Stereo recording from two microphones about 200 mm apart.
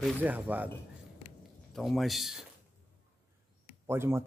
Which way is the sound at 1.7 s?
Centre (ahead or behind).